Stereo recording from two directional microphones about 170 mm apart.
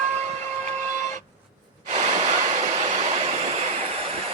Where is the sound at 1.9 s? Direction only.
45° right (ahead or behind).